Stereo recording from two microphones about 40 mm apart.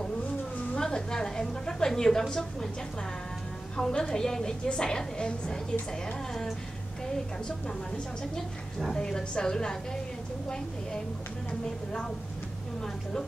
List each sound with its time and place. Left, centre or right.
0.7 s a woman's voice: centre
3.7 s a woman's voice: centre
8.2 s a woman's voice: centre